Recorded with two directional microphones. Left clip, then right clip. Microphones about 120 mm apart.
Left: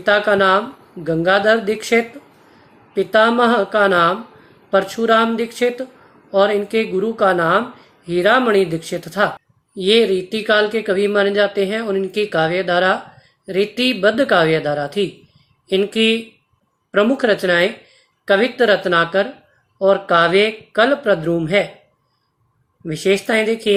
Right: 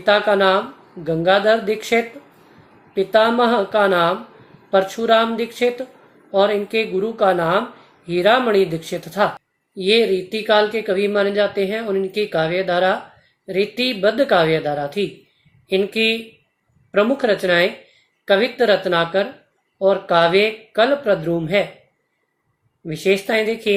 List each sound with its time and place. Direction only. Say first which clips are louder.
0.0 s speech: left 1 dB; 40° left (ahead or behind)
22.9 s speech: left 1 dB; 40° left (ahead or behind)